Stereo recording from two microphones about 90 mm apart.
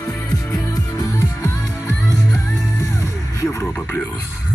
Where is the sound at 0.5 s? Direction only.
35° left (ahead or behind).